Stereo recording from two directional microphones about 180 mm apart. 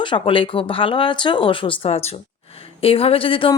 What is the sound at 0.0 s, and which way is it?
Speech, 30° left (ahead or behind).